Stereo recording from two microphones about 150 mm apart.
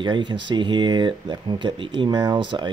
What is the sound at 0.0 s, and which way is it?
Speech, 30° right (ahead or behind).